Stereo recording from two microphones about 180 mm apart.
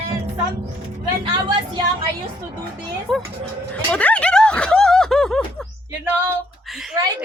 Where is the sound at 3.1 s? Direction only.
Centre (ahead or behind).